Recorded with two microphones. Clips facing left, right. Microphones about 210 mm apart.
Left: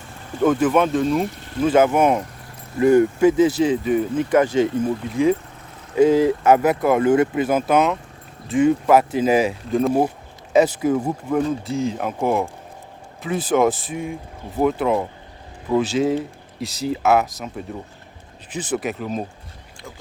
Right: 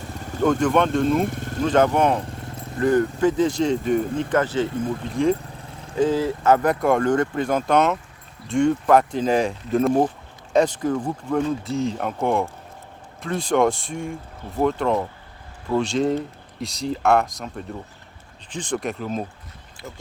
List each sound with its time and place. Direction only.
0.4 s speech: 5° left (ahead or behind)
1.2 s a sound: 50° right (ahead or behind)
1.6 s speech: 5° left (ahead or behind)
18.5 s speech: 5° left (ahead or behind)